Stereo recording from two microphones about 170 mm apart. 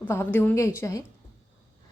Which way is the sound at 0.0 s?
10° left (ahead or behind).